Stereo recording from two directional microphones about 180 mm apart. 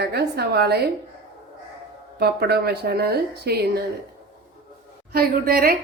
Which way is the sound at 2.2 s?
60° right (ahead or behind).